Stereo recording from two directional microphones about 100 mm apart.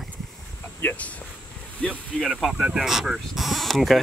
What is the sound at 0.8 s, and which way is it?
Speech, 20° left (ahead or behind).